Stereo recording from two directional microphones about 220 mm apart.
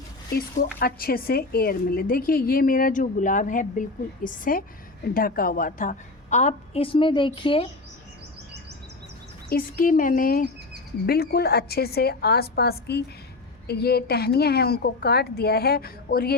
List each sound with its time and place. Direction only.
0.3 s speech: 45° left (ahead or behind); by 7.7 s 25° left (ahead or behind)
9.5 s a woman's voice: 40° left (ahead or behind)